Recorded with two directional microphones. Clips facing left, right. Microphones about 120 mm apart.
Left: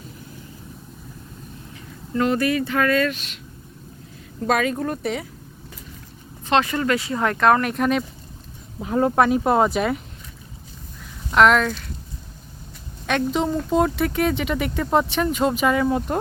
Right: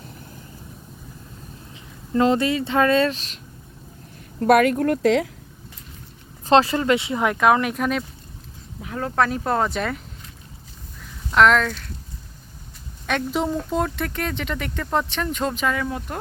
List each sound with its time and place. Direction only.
2.1 s speech: 25° right (ahead or behind)
4.4 s speech: 60° right (ahead or behind); by 5.3 s 90° right
6.5 s speech: 30° right (ahead or behind)
7.2 s speech: 10° right (ahead or behind)
8.8 s speech: 25° left (ahead or behind)
9.1 s speech: 15° left (ahead or behind)
11.0 s a sound: 5° left (ahead or behind)
13.1 s speech: centre (ahead or behind); by 16.1 s 25° left (ahead or behind)